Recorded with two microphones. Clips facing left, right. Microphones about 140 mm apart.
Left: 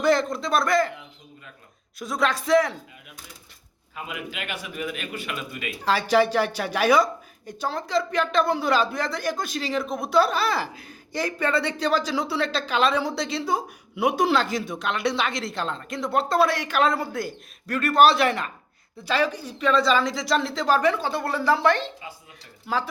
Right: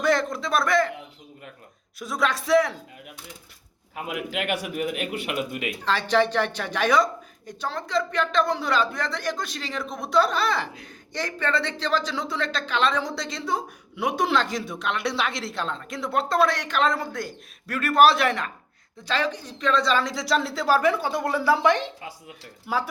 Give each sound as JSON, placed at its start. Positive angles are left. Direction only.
{"t": 0.0, "sound": "a man's voice", "side_deg": 0}
{"t": 2.0, "sound": "speech", "side_deg": 0}
{"t": 3.9, "sound": "a man's voice", "side_deg": -60}
{"t": 5.2, "sound": "a man's voice", "side_deg": -20}
{"t": 5.8, "sound": "speech", "side_deg": 10}